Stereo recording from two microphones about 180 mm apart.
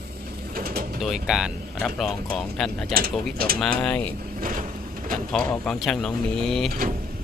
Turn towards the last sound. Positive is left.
turn(degrees=0)  # may be behind; listen again after turning